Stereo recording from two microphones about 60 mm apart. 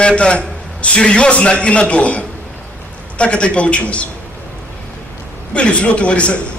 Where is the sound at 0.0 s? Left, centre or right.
Centre.